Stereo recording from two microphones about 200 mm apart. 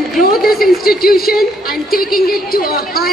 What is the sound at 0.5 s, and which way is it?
Music, centre (ahead or behind).